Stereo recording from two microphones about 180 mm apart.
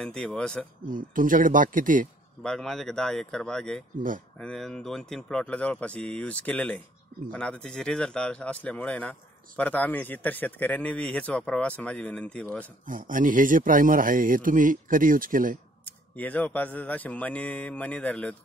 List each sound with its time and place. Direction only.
0.0 s a man's voice: 5° left (ahead or behind)
0.8 s speech: 50° right (ahead or behind)
2.4 s a man's voice: 5° left (ahead or behind)
12.8 s speech: 50° right (ahead or behind)
15.8 s a man's voice: 10° left (ahead or behind)